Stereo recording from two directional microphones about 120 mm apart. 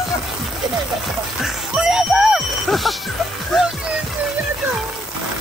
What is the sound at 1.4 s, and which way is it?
Music, 5° right (ahead or behind).